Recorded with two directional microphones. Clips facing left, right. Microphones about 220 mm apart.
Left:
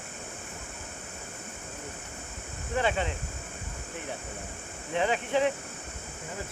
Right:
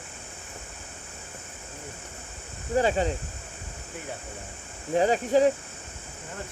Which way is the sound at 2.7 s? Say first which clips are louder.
Right 5 dB; 40° right (ahead or behind).